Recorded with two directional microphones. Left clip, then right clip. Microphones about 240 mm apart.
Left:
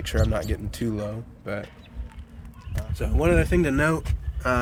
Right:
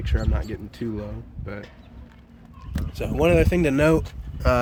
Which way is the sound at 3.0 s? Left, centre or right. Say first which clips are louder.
Right 3 dB; right.